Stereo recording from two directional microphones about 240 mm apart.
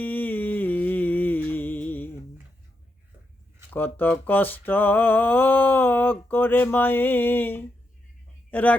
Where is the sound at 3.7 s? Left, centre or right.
Centre.